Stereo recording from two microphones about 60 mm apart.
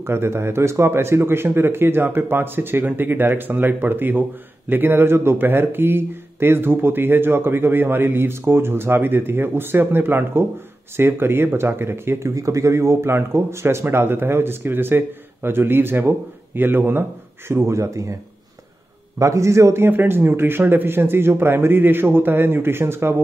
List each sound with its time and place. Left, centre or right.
0.0 s speech: right
12.4 s speech: right
17.5 s speech: right
19.1 s a man's voice: right
19.9 s speech: right